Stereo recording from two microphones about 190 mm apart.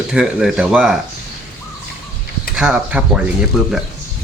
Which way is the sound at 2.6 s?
5° right (ahead or behind).